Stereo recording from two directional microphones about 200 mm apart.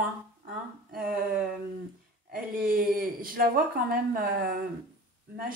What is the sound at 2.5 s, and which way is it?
Speech, 45° right (ahead or behind).